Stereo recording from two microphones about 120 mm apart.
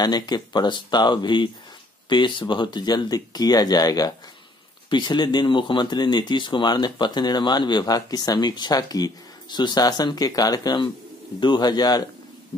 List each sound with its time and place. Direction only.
0.0 s speech: 35° left (ahead or behind)